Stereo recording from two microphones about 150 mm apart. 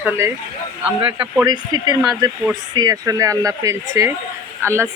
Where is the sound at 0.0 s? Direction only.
15° right (ahead or behind).